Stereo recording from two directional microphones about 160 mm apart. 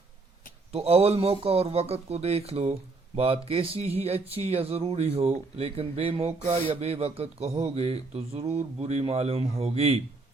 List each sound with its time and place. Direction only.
0.7 s speech: 40° right (ahead or behind)